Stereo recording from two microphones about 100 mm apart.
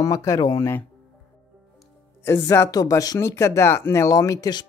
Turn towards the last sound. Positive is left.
turn(degrees=40)  # may be behind; listen again after turning